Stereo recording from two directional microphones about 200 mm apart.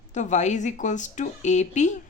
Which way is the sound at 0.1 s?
35° left (ahead or behind).